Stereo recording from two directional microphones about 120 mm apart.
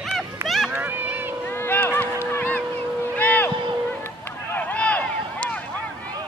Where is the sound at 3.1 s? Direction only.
15° left (ahead or behind).